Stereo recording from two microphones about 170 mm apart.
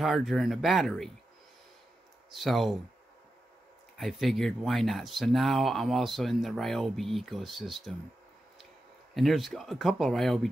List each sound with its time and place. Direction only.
0.0 s speech: centre (ahead or behind)
2.3 s speech: centre (ahead or behind)
4.0 s speech: centre (ahead or behind)
9.1 s speech: centre (ahead or behind)